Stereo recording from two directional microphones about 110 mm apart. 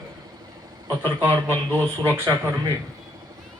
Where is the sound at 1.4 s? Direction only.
20° right (ahead or behind).